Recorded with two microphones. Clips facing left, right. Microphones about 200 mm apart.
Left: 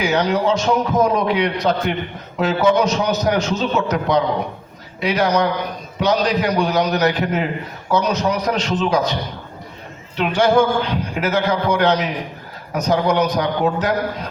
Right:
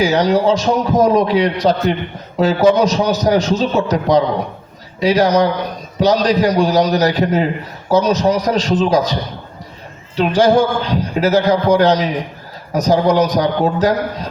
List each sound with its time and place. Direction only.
0.0 s a man's voice: 35° right (ahead or behind)
10.2 s a man's voice: 35° right (ahead or behind)